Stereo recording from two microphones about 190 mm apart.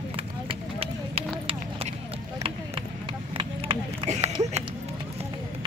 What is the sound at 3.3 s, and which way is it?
Run, 25° right (ahead or behind).